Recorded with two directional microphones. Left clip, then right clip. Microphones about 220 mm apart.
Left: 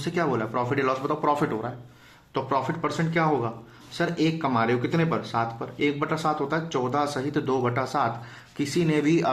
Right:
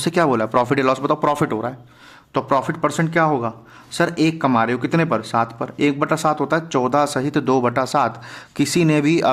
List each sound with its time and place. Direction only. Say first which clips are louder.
0.0 s speech: right 9 dB; 50° right (ahead or behind)